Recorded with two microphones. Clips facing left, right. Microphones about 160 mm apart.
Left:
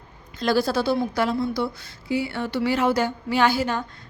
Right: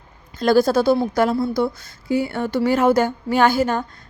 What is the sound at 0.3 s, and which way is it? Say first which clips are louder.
Speech: right 6 dB; 45° right (ahead or behind).